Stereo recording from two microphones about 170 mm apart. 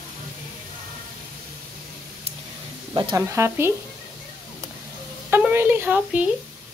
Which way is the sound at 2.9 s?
25° right (ahead or behind).